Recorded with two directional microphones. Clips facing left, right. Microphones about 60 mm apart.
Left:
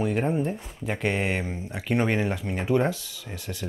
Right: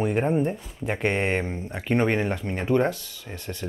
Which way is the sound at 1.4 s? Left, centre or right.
Centre.